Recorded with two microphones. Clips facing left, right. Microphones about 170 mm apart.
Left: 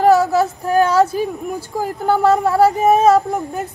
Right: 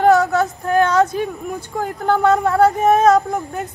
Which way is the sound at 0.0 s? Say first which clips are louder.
Left 1 dB; centre (ahead or behind).